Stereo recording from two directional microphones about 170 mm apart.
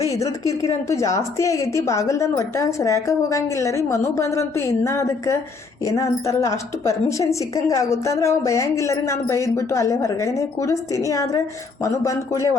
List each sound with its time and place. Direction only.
0.1 s a woman's voice: 20° left (ahead or behind)